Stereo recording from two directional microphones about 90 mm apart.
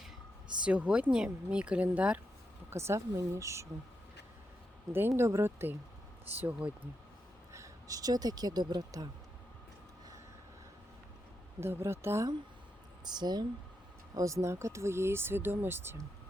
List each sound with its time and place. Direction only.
0.6 s speech: 15° right (ahead or behind)
2.6 s speech: 30° right (ahead or behind)
4.9 s speech: 25° right (ahead or behind)
6.4 s speech: 15° right (ahead or behind)
7.5 s speech: 35° right (ahead or behind)
11.6 s speech: 30° right (ahead or behind)
13.1 s speech: 50° right (ahead or behind)
14.2 s speech: 35° right (ahead or behind)